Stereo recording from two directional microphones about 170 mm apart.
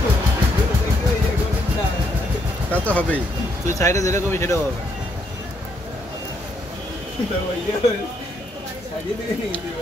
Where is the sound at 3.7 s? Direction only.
20° left (ahead or behind).